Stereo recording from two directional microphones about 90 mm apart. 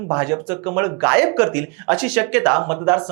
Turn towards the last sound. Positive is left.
turn(degrees=-25)  # may be behind; listen again after turning